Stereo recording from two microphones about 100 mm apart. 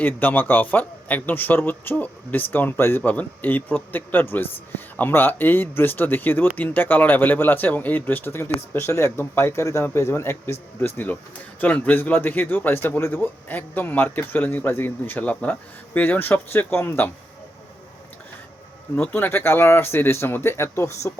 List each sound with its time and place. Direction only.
0.0 s speech: 20° left (ahead or behind)
18.9 s speech: 15° left (ahead or behind)